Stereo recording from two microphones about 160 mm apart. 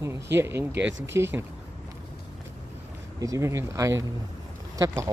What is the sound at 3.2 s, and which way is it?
Speech, 20° right (ahead or behind).